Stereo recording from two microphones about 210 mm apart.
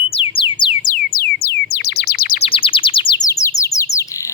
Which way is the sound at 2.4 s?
25° left (ahead or behind).